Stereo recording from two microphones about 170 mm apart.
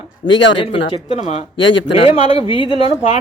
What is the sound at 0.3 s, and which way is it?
Speech, 90° left.